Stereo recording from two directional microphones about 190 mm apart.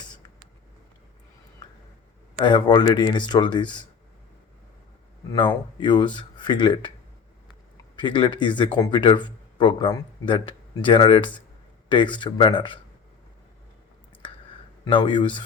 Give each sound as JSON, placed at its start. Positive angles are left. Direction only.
{"t": 2.4, "sound": "speech", "side_deg": 25}
{"t": 5.3, "sound": "speech", "side_deg": 25}
{"t": 8.0, "sound": "speech", "side_deg": 25}
{"t": 14.8, "sound": "speech", "side_deg": 25}